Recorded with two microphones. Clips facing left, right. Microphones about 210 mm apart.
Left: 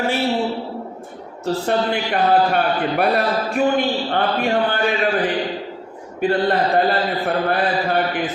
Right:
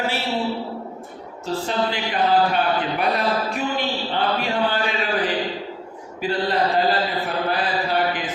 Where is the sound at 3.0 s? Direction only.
60° left (ahead or behind).